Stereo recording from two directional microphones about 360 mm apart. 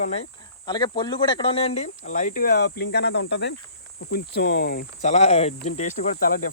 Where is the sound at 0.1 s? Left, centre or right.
Centre.